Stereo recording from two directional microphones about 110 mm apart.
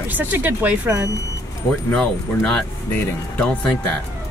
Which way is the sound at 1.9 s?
10° left (ahead or behind).